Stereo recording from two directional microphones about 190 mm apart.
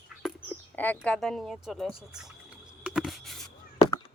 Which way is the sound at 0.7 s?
10° left (ahead or behind).